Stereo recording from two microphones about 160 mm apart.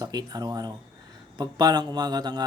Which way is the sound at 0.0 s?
25° right (ahead or behind).